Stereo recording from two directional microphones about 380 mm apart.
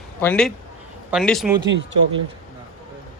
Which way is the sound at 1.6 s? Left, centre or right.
Right.